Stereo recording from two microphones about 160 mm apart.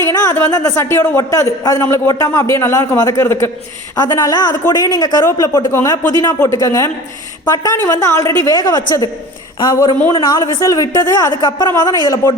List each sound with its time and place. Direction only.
0.1 s speech: 20° left (ahead or behind)
10.2 s speech: 25° left (ahead or behind)